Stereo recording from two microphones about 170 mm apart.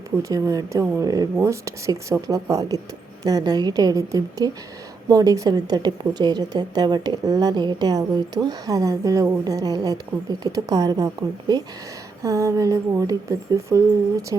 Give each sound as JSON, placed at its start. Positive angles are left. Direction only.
{"t": 0.2, "sound": "a woman's voice", "side_deg": -20}